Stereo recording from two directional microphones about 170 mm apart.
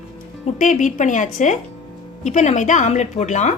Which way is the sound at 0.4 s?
50° left (ahead or behind).